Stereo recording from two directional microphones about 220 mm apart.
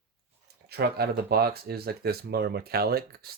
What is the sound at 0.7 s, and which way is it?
Speech, 45° right (ahead or behind).